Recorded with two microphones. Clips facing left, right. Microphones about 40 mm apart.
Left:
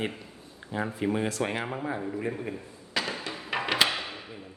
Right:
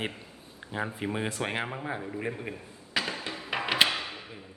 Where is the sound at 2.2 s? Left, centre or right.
Centre.